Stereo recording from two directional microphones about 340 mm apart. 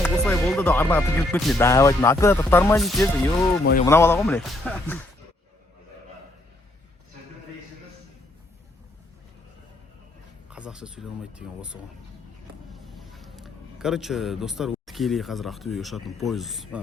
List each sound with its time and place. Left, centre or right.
0.0 s speech: centre
3.6 s speech: left
3.8 s speech: centre
10.5 s speech: centre